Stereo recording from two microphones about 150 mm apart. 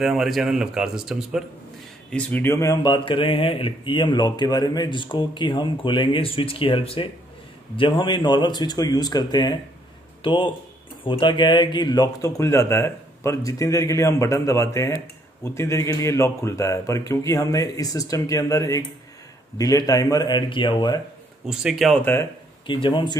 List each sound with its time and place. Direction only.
0.0 s speech: centre (ahead or behind)
2.0 s speech: 10° left (ahead or behind); by 21.0 s 30° left (ahead or behind)
21.5 s speech: centre (ahead or behind)
22.0 s speech: 15° left (ahead or behind)
22.7 s speech: 35° left (ahead or behind)